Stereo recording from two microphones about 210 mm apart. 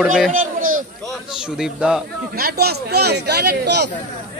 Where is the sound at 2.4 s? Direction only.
45° right (ahead or behind).